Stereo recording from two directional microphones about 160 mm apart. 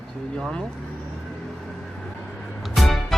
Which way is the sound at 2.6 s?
Centre (ahead or behind).